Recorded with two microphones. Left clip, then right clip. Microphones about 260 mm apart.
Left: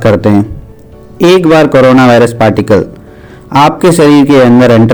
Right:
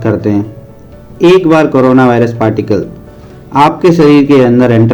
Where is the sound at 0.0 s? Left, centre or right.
Left.